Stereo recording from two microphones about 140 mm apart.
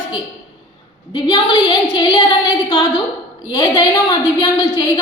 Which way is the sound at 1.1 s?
35° left (ahead or behind).